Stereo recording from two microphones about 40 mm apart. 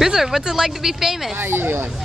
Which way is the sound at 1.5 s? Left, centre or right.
Right.